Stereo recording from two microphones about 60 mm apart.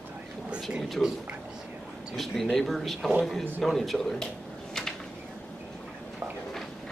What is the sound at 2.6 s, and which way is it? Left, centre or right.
Speech, centre.